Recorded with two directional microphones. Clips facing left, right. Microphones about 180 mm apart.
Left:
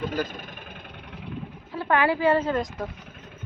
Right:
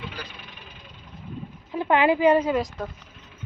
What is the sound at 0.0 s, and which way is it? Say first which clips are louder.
Vehicle: left 10 dB; 45° left (ahead or behind).